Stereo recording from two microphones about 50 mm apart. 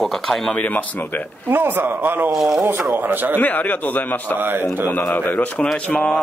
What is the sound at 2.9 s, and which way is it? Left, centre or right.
Speech, right.